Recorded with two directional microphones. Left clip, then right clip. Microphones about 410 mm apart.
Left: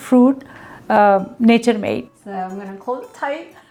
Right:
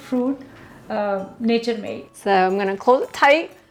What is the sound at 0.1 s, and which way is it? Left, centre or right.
Speech, left.